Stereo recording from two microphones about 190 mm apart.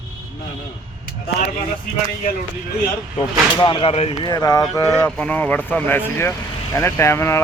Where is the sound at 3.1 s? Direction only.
25° left (ahead or behind).